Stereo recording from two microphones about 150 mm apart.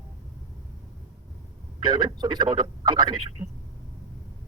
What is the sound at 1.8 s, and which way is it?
Speech, 30° right (ahead or behind).